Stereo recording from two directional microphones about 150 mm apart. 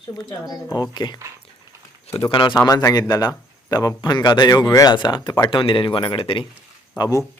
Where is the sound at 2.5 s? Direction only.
20° left (ahead or behind).